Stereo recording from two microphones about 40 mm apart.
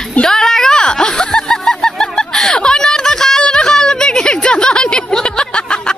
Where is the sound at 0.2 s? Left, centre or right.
Centre.